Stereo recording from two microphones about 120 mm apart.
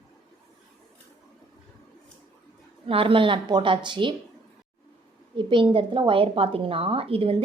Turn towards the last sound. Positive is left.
turn(degrees=-50)  # may be behind; listen again after turning